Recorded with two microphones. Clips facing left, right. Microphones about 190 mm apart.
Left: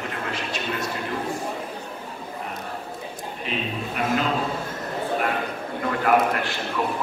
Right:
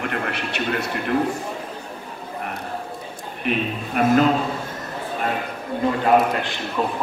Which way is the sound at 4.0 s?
50° right (ahead or behind).